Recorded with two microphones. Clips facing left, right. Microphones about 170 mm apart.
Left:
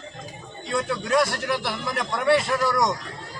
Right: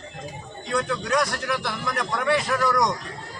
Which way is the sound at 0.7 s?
25° left (ahead or behind).